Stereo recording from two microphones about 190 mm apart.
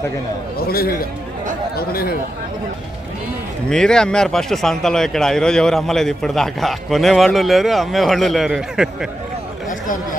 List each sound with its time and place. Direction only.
0.7 s a man's voice: 50° left (ahead or behind)
3.7 s speech: 5° left (ahead or behind)
9.6 s a sound: 45° left (ahead or behind)